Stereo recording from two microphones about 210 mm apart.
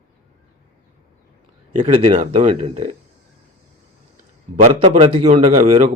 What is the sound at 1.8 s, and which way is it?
Speech, 35° right (ahead or behind).